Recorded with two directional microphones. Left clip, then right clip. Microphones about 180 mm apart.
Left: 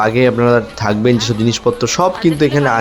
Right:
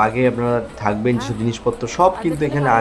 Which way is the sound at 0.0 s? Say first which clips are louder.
Left 5 dB; 30° left (ahead or behind).